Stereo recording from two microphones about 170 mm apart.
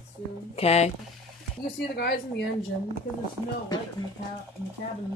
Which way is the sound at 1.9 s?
70° left (ahead or behind).